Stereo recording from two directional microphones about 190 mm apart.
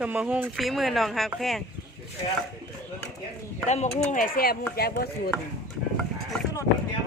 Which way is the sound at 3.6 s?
40° left (ahead or behind).